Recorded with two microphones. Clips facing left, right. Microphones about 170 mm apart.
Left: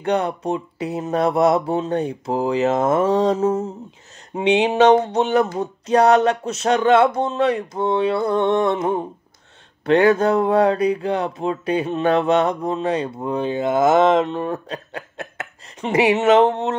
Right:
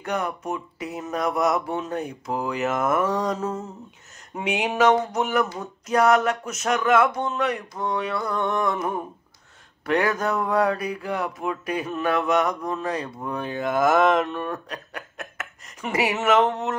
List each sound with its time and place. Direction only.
0.0 s speech: 30° left (ahead or behind)